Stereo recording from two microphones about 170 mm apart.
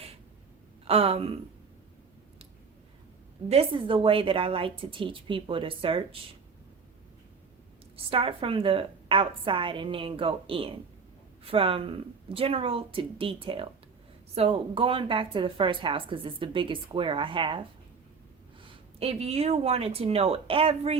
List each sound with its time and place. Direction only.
0.9 s speech: 35° right (ahead or behind)
3.5 s speech: 35° right (ahead or behind)
7.9 s speech: 30° right (ahead or behind)
18.7 s speech: 35° right (ahead or behind)